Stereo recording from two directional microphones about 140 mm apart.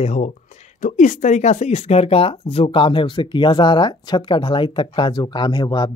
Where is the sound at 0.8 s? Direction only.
65° left (ahead or behind).